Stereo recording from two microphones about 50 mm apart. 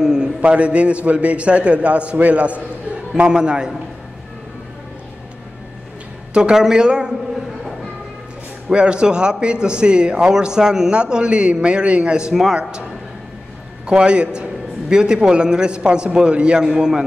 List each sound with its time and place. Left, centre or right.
0.0 s a sound: centre
0.4 s a man's voice: right
6.3 s a man's voice: centre
8.6 s a man's voice: centre
13.8 s a man's voice: centre